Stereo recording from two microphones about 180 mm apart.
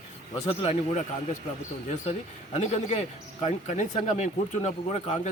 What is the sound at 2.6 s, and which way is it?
Speech, 40° left (ahead or behind).